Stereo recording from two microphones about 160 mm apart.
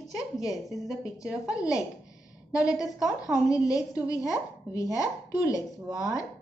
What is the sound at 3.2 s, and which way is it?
A woman's voice, 20° left (ahead or behind).